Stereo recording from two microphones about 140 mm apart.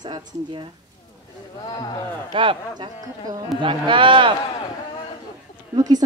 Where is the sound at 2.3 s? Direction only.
35° right (ahead or behind).